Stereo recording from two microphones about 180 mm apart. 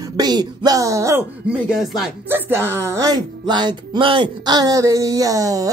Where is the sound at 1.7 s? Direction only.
Centre (ahead or behind).